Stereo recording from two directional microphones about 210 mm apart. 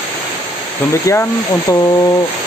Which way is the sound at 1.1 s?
15° left (ahead or behind).